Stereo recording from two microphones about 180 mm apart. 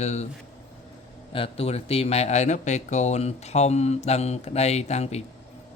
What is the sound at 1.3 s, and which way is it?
A man's voice, 30° left (ahead or behind).